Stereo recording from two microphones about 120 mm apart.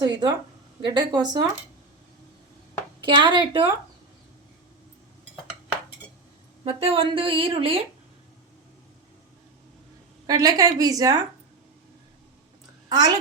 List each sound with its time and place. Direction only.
0.0 s a woman's voice: 35° right (ahead or behind)
3.0 s a woman's voice: 40° right (ahead or behind)
6.7 s speech: 55° right (ahead or behind)
10.2 s a woman's voice: 30° right (ahead or behind)
12.9 s a child's voice: 35° right (ahead or behind)